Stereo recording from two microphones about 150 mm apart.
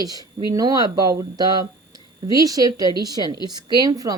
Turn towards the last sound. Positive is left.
turn(degrees=-25)  # may be behind; listen again after turning